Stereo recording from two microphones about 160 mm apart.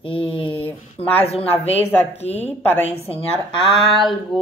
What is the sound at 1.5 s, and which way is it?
Speech, 40° left (ahead or behind).